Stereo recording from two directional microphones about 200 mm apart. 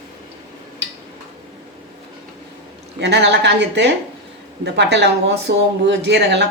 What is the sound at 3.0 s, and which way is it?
Speech, 60° right (ahead or behind).